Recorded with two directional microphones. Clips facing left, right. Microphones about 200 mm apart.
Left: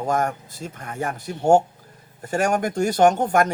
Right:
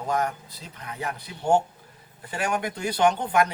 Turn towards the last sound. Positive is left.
turn(degrees=45)  # may be behind; listen again after turning